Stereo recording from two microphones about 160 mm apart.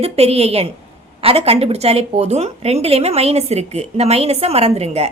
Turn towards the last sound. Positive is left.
turn(degrees=-40)  # may be behind; listen again after turning